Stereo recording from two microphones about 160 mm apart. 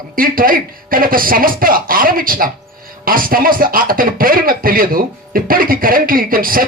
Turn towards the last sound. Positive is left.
turn(degrees=-60)  # may be behind; listen again after turning